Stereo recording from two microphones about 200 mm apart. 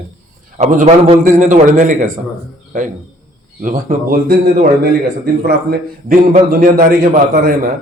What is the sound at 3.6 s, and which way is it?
Speech, 45° right (ahead or behind).